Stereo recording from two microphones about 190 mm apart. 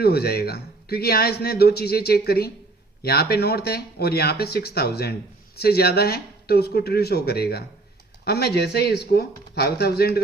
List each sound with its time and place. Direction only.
0.0 s a man's voice: 55° left (ahead or behind)